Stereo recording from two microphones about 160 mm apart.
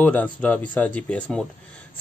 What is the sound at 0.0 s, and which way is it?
Speech, 10° left (ahead or behind).